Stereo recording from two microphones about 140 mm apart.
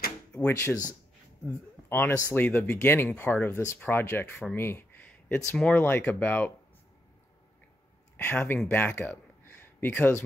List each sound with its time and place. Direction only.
0.3 s speech: 15° left (ahead or behind)
8.2 s speech: 15° left (ahead or behind)